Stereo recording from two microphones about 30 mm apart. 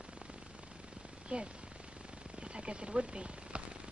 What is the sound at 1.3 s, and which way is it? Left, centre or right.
Speech, right.